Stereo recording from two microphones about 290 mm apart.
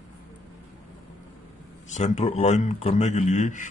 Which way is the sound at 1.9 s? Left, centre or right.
Left.